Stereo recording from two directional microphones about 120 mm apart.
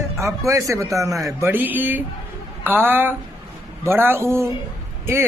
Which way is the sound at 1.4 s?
20° right (ahead or behind).